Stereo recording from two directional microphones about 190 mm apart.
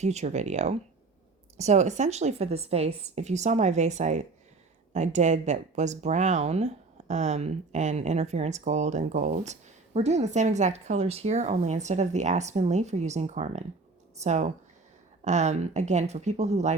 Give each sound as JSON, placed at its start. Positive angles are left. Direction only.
{"t": 0.0, "sound": "a woman's voice", "side_deg": -35}